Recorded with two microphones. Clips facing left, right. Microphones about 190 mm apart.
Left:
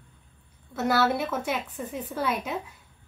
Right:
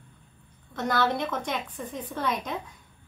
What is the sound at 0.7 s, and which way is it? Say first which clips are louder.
A woman's voice: left 2 dB; 5° left (ahead or behind).